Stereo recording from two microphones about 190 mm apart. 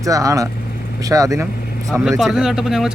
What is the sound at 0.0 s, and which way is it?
Speech, 15° right (ahead or behind).